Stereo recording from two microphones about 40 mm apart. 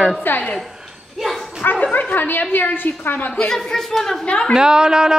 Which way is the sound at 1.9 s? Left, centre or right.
Left.